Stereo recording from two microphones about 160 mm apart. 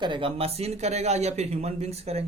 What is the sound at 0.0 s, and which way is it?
Speech, 30° right (ahead or behind).